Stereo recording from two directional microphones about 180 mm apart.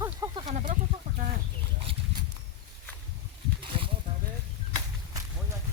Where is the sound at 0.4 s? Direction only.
40° right (ahead or behind).